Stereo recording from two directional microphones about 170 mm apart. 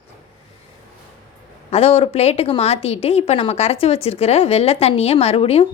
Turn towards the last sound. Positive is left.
turn(degrees=35)  # may be behind; listen again after turning